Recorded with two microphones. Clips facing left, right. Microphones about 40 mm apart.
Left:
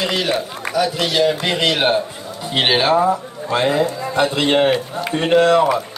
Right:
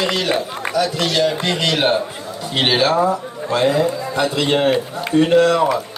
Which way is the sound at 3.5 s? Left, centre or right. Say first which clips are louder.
Right 1 dB; left.